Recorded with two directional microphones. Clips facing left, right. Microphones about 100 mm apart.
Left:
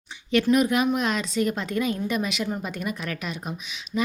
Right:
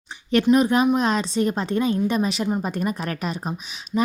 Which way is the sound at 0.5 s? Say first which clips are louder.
Right 4 dB; 30° right (ahead or behind).